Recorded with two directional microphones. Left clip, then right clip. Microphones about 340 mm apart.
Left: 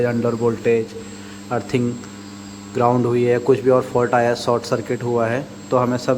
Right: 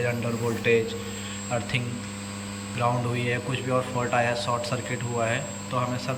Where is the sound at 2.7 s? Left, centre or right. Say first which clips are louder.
Left 10 dB; centre.